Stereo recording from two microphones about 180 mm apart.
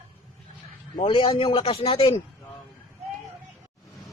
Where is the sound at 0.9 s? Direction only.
25° left (ahead or behind).